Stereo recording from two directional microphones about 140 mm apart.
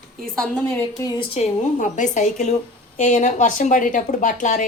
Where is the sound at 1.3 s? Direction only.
55° left (ahead or behind).